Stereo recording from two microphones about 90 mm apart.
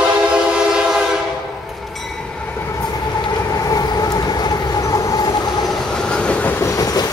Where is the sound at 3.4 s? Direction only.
40° left (ahead or behind).